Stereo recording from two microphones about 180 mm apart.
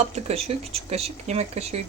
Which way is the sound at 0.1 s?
35° right (ahead or behind).